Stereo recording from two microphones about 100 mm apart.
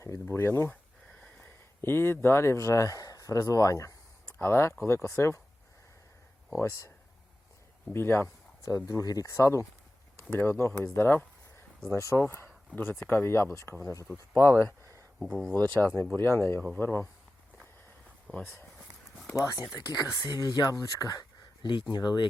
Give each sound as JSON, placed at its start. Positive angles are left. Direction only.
{"t": 0.0, "sound": "speech", "side_deg": 30}
{"t": 0.7, "sound": "a sound", "side_deg": 15}
{"t": 4.4, "sound": "speech", "side_deg": 25}
{"t": 6.6, "sound": "speech", "side_deg": 30}
{"t": 7.9, "sound": "speech", "side_deg": 25}
{"t": 10.9, "sound": "a sound", "side_deg": 20}
{"t": 11.9, "sound": "speech", "side_deg": 30}
{"t": 14.5, "sound": "a sound", "side_deg": -30}
{"t": 15.2, "sound": "speech", "side_deg": 0}
{"t": 16.1, "sound": "speech", "side_deg": 25}
{"t": 16.6, "sound": "speech", "side_deg": 15}
{"t": 16.8, "sound": "speech", "side_deg": 25}
{"t": 18.3, "sound": "speech", "side_deg": 5}
{"t": 19.4, "sound": "speech", "side_deg": 35}